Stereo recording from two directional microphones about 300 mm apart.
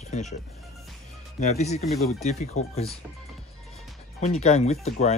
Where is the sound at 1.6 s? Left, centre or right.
Left.